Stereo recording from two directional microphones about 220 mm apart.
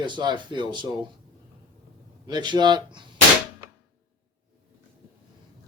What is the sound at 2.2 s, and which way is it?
Speech, 20° right (ahead or behind).